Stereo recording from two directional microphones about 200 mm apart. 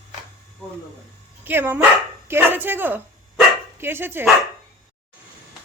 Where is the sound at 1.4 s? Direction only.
10° right (ahead or behind).